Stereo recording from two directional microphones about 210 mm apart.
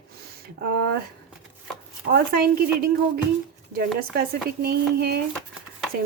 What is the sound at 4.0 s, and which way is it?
Speech, 50° right (ahead or behind).